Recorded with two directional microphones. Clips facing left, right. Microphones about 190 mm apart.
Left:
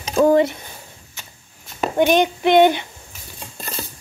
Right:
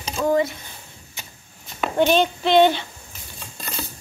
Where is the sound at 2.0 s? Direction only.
15° left (ahead or behind).